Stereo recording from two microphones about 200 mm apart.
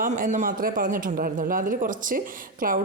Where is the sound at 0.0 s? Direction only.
40° right (ahead or behind).